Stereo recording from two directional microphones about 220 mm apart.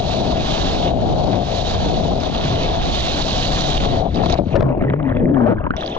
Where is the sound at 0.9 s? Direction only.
15° right (ahead or behind).